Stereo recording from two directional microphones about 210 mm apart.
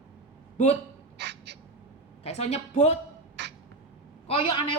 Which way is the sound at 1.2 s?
55° right (ahead or behind).